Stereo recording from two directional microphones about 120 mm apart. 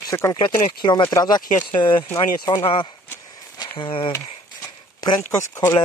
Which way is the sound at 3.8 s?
50° left (ahead or behind).